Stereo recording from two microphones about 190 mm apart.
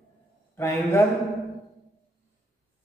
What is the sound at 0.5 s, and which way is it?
Speech, 15° left (ahead or behind).